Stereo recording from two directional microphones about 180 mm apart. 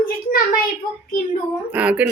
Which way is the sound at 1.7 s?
10° right (ahead or behind).